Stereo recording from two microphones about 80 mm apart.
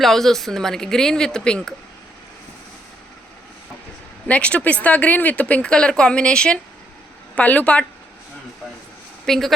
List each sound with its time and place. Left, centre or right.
0.0 s speech: centre
4.3 s speech: centre
9.2 s speech: centre